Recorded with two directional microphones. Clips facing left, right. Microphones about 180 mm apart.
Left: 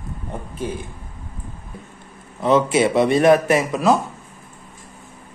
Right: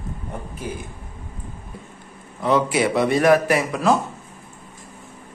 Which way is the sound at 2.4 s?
25° left (ahead or behind).